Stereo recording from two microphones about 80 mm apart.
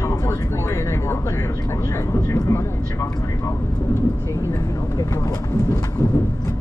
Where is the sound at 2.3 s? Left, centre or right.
Left.